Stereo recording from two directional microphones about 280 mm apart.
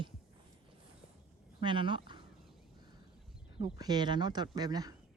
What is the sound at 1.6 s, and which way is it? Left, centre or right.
Speech, centre.